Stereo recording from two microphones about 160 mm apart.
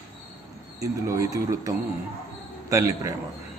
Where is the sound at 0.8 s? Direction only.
20° right (ahead or behind).